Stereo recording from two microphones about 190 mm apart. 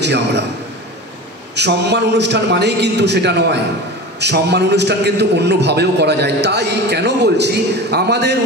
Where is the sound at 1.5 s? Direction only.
65° right (ahead or behind).